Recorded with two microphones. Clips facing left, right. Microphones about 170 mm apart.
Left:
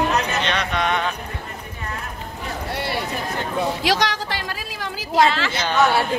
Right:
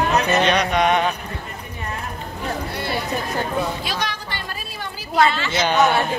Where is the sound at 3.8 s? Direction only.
90° left.